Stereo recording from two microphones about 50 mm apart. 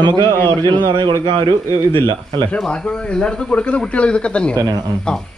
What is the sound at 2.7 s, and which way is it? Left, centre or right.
Speech, left.